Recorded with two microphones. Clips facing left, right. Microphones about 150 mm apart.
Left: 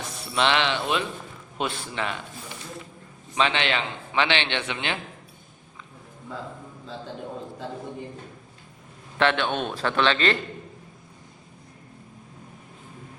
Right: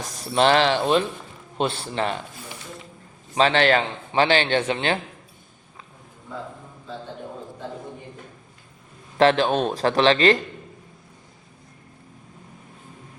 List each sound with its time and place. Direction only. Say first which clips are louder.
0.0 s a man's voice: right 5 dB; 40° right (ahead or behind)
3.3 s a man's voice: right 6 dB; 40° right (ahead or behind)
9.1 s a man's voice: right 6 dB; 35° right (ahead or behind)